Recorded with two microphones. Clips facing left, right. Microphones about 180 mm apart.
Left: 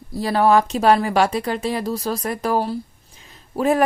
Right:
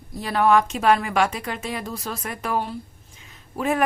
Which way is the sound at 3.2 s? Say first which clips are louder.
Left 6 dB; 35° left (ahead or behind).